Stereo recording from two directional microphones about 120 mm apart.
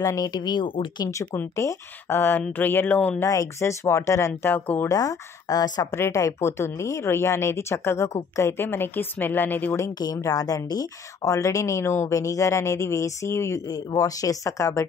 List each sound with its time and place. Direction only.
0.0 s speech: 30° left (ahead or behind)
1.1 s speech: 20° left (ahead or behind)
3.2 s speech: 25° left (ahead or behind)
4.8 s speech: 30° left (ahead or behind)
9.9 s speech: 30° left (ahead or behind)